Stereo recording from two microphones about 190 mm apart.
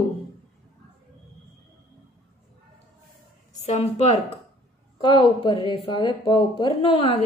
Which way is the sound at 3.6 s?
30° left (ahead or behind).